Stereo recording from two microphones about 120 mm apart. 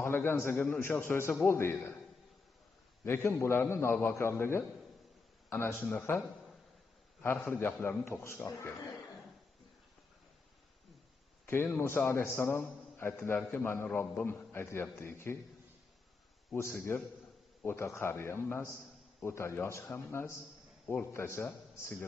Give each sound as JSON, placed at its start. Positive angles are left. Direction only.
{"t": 0.0, "sound": "a man's voice", "side_deg": 20}
{"t": 3.0, "sound": "a man's voice", "side_deg": 20}
{"t": 11.4, "sound": "a man's voice", "side_deg": 20}
{"t": 16.5, "sound": "a man's voice", "side_deg": 20}